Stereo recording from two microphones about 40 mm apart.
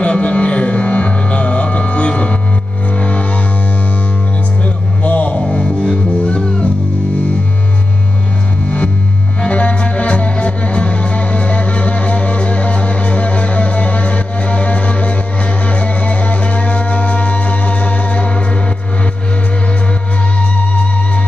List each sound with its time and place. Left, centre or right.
0.0 s music: left
5.0 s music: left
5.5 s music: centre
9.5 s music: left